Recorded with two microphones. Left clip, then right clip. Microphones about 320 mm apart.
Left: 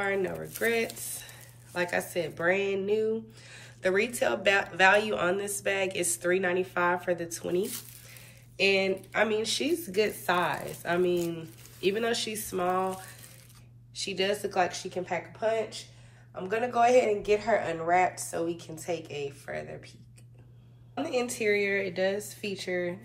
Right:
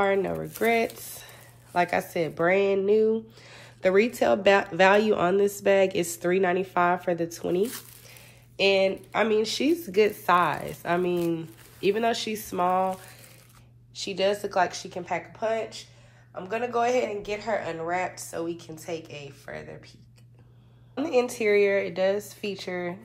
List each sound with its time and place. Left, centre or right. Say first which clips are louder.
0.0 s speech: right 5 dB; centre
7.3 s a sound: right 4 dB; centre
8.8 s speech: right 3 dB; centre
14.2 s speech: right 4 dB; centre
16.4 s speech: left 1 dB; centre
20.9 s speech: right 6 dB; centre